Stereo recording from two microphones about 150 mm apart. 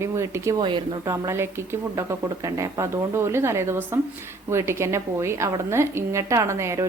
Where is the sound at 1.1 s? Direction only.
15° right (ahead or behind).